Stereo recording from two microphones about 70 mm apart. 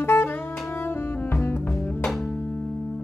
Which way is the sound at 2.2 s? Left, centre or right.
Left.